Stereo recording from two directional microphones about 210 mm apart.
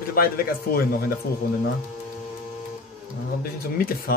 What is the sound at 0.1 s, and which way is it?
Speech, 45° left (ahead or behind).